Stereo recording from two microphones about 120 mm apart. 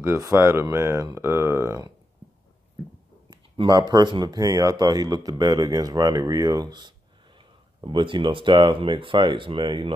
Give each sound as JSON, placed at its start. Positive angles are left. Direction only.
{"t": 0.0, "sound": "speech", "side_deg": -20}
{"t": 3.3, "sound": "speech", "side_deg": -40}